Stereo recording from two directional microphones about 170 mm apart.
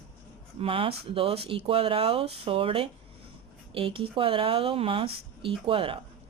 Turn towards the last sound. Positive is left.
turn(degrees=-30)  # may be behind; listen again after turning